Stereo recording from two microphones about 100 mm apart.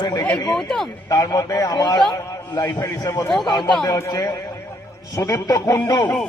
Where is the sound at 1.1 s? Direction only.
35° left (ahead or behind).